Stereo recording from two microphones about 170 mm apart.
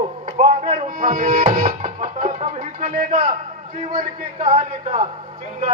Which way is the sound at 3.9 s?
30° right (ahead or behind).